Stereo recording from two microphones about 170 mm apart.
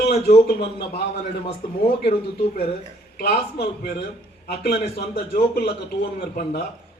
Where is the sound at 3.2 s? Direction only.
70° left (ahead or behind).